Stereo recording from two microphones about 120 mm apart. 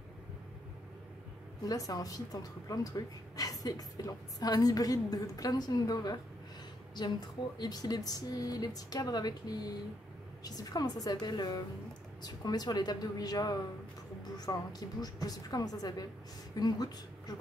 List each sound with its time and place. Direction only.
1.7 s speech: 30° left (ahead or behind)